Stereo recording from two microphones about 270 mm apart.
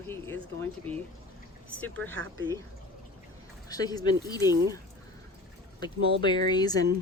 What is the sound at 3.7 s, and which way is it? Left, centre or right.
Speech, centre.